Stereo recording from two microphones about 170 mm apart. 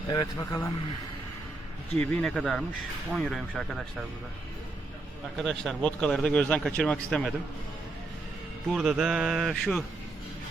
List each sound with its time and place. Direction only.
0.1 s a man's voice: 20° left (ahead or behind)
2.0 s speech: 5° left (ahead or behind)
5.4 s speech: 5° left (ahead or behind)
8.7 s speech: centre (ahead or behind)